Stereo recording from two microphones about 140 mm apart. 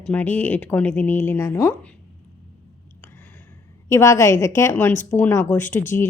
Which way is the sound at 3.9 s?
20° left (ahead or behind).